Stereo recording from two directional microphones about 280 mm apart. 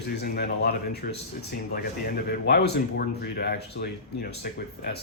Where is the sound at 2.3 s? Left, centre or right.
Left.